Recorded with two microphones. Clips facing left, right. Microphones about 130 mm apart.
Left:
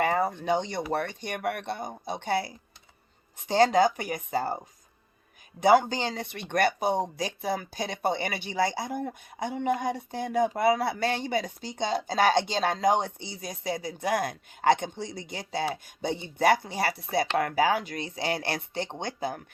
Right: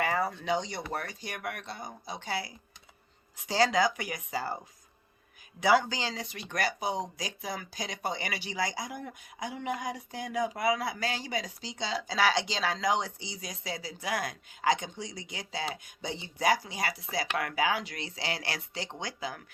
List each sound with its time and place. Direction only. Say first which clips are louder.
0.0 s a sound: left 4 dB; 45° left (ahead or behind)
0.3 s speech: left 4 dB; 55° left (ahead or behind)
5.5 s speech: left 5 dB; 50° left (ahead or behind)
8.4 s speech: left 7 dB; 30° left (ahead or behind)
9.0 s speech: left 7 dB; 55° left (ahead or behind)
10.5 s speech: left 5 dB; 30° left (ahead or behind)
11.0 s speech: left 6 dB; 60° left (ahead or behind)
17.3 s speech: left 4 dB; 35° left (ahead or behind); by 19.3 s 55° left (ahead or behind)